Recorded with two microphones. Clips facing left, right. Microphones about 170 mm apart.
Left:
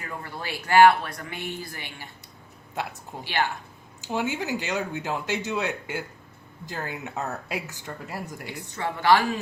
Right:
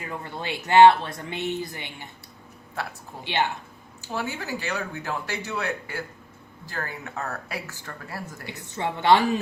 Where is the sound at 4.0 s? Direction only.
20° left (ahead or behind).